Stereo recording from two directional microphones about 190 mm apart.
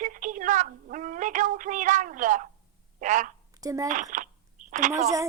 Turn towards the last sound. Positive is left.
turn(degrees=-40)  # may be behind; listen again after turning